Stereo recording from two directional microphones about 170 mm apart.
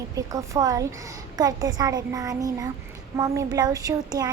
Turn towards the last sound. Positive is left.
turn(degrees=-20)  # may be behind; listen again after turning